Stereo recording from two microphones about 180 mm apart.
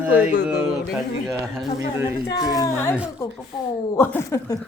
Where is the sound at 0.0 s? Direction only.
10° right (ahead or behind).